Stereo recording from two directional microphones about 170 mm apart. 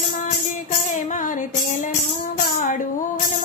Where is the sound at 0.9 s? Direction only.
50° left (ahead or behind).